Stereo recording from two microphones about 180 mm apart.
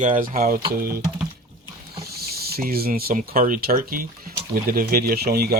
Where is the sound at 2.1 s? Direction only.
60° right (ahead or behind).